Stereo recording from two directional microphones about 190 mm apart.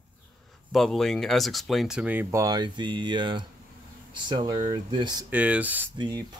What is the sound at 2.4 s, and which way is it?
Speech, 20° right (ahead or behind).